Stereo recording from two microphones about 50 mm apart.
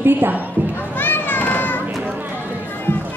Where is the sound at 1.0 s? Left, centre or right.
Left.